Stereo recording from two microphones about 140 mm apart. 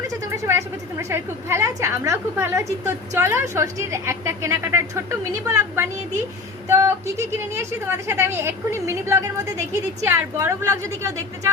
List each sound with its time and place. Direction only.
0.4 s a woman's voice: 20° right (ahead or behind)